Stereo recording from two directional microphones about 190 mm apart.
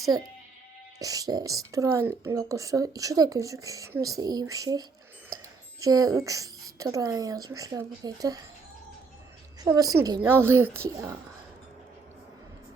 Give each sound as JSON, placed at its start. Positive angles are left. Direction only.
{"t": 0.9, "sound": "a woman's voice", "side_deg": -20}
{"t": 9.6, "sound": "a woman's voice", "side_deg": -20}